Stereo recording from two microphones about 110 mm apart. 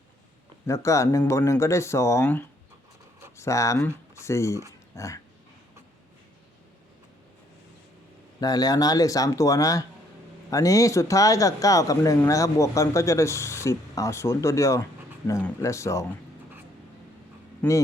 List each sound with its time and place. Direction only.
0.7 s speech: 25° left (ahead or behind)
3.3 s speech: 25° left (ahead or behind)
8.4 s speech: 35° left (ahead or behind)
17.6 s a man's voice: 15° left (ahead or behind)